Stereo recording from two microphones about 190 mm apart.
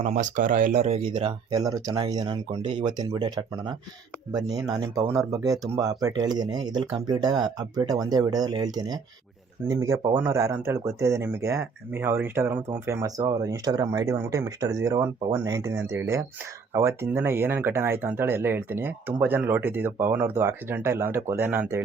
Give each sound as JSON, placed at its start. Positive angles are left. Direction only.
{"t": 0.1, "sound": "speech", "side_deg": -45}